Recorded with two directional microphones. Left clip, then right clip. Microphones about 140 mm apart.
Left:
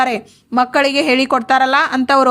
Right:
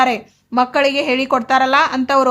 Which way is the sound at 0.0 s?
30° left (ahead or behind).